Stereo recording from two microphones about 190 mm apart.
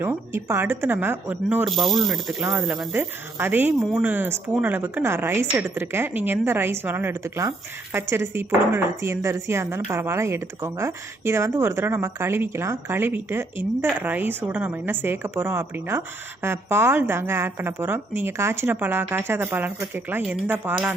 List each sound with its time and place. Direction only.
0.0 s speech: 10° right (ahead or behind)